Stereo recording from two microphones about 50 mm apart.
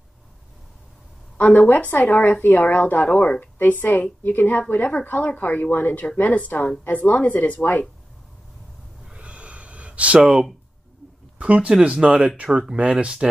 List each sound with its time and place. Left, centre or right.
1.4 s speech: left
9.0 s gasp: right
10.2 s speech: centre
11.3 s speech: right